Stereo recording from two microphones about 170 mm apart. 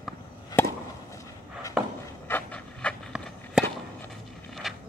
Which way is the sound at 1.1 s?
20° left (ahead or behind).